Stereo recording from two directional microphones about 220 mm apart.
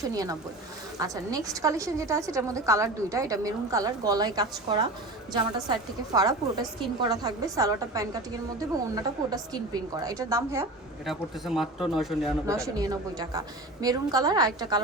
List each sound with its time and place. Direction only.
0.0 s a woman's voice: 15° right (ahead or behind)
6.1 s a woman's voice: 15° right (ahead or behind)
11.0 s speech: centre (ahead or behind)
12.5 s a woman's voice: 15° right (ahead or behind)